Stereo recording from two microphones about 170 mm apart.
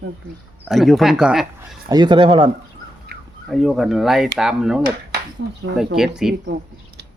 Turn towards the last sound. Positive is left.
turn(degrees=0)  # may be behind; listen again after turning